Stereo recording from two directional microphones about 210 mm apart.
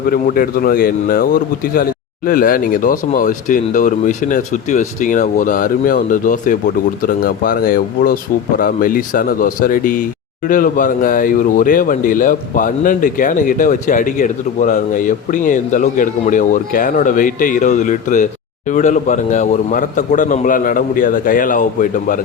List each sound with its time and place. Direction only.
0.1 s speech: 45° left (ahead or behind)